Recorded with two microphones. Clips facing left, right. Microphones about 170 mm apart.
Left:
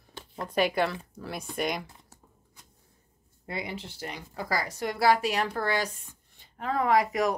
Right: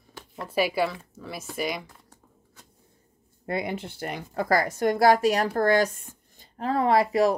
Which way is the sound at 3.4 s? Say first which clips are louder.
Right 6 dB; 55° right (ahead or behind).